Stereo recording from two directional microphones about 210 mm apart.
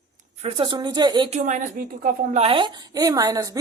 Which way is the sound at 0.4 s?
25° right (ahead or behind).